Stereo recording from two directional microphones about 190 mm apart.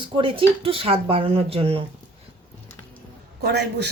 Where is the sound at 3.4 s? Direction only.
60° right (ahead or behind).